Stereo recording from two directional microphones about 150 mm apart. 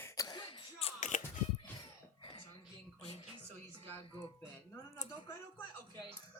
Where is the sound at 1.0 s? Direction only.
55° left (ahead or behind).